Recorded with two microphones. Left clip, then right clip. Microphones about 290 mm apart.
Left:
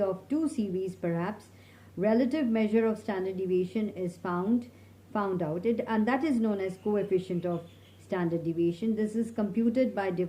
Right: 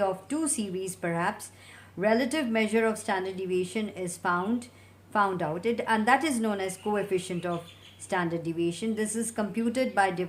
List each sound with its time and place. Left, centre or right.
0.0 s a woman's voice: right